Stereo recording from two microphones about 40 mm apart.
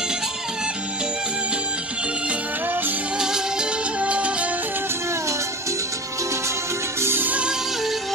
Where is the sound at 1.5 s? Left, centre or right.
Right.